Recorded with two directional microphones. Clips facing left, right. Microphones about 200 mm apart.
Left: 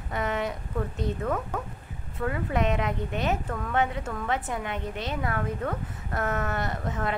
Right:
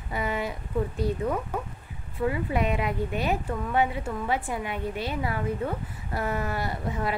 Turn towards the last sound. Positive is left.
turn(degrees=-10)  # may be behind; listen again after turning